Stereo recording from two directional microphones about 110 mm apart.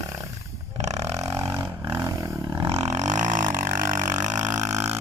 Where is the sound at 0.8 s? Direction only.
85° right.